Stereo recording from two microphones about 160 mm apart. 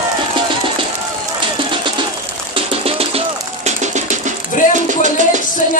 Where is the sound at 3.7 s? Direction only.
50° right (ahead or behind).